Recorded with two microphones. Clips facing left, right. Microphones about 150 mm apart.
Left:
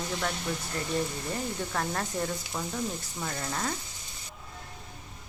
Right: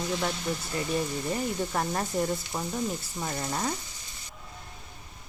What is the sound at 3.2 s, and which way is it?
Speech, 15° right (ahead or behind).